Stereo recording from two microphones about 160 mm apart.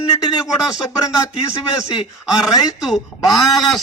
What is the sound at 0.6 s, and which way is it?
Speech, 5° right (ahead or behind).